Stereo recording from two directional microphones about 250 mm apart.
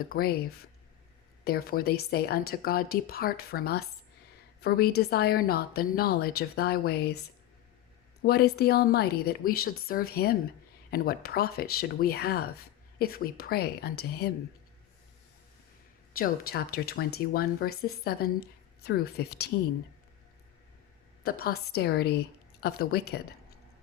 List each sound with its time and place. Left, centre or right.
0.0 s speech: left
1.5 s speech: left
16.1 s speech: left
21.2 s speech: left